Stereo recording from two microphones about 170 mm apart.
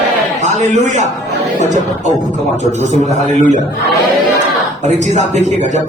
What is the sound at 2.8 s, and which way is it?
Speech, 45° right (ahead or behind).